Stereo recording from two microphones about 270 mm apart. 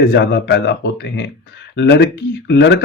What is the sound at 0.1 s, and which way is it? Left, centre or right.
A man's voice, left.